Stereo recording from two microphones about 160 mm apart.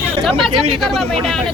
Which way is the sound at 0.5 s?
35° right (ahead or behind).